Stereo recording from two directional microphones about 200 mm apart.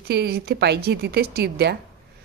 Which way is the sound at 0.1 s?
55° right (ahead or behind).